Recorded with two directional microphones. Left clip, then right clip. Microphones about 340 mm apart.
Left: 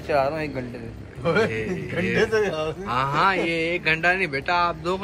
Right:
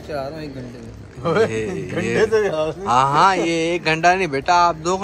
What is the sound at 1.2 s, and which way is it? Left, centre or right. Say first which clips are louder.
A man's voice: right 4 dB; right.